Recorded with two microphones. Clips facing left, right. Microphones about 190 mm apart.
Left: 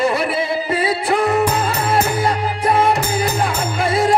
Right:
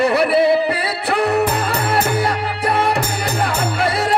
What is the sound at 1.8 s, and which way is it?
Music, 65° right (ahead or behind).